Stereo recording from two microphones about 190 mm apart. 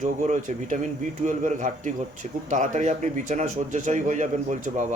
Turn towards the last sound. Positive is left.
turn(degrees=-40)  # may be behind; listen again after turning